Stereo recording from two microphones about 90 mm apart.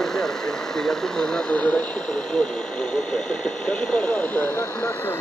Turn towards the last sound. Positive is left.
turn(degrees=20)  # may be behind; listen again after turning